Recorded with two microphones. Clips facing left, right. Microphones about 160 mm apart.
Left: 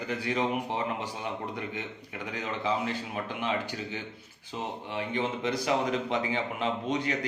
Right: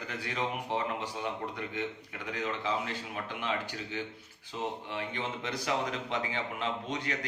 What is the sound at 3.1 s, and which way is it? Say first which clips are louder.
Speech: left 1 dB; 15° left (ahead or behind).